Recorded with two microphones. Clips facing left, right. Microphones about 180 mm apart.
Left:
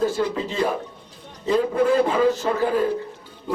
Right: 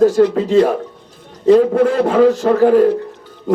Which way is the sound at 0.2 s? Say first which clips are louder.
Right 12 dB; 65° right (ahead or behind).